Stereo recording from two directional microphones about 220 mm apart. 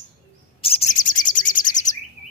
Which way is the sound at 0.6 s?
25° left (ahead or behind).